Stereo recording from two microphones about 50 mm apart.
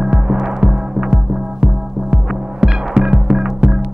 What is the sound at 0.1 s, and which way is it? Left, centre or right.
Music, centre.